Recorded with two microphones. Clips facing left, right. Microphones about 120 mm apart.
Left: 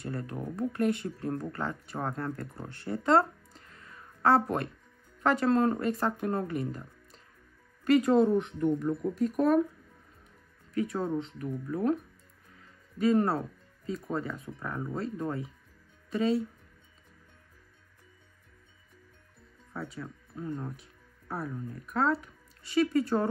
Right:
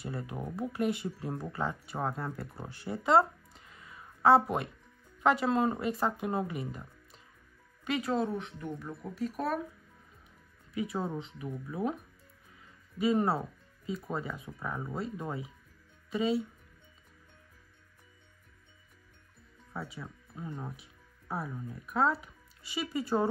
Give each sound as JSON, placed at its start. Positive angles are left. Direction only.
{"t": 0.0, "sound": "speech", "side_deg": -5}
{"t": 10.7, "sound": "speech", "side_deg": -5}
{"t": 19.7, "sound": "speech", "side_deg": -5}